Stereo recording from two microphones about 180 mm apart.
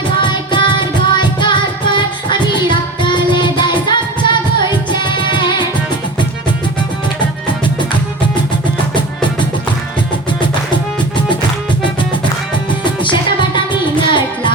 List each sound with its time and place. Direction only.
0.2 s music: 25° left (ahead or behind)
12.8 s music: 25° left (ahead or behind)